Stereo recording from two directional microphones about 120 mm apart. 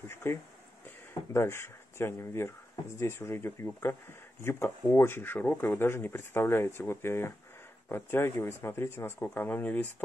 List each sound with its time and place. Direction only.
0.1 s speech: 20° left (ahead or behind)